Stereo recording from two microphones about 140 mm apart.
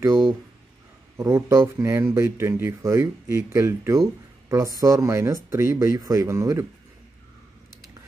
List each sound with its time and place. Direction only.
0.0 s speech: 15° right (ahead or behind)